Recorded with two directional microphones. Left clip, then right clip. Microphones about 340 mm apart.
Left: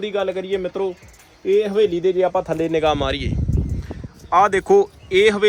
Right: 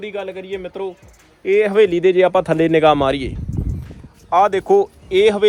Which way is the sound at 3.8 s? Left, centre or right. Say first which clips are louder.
Left 5 dB; centre.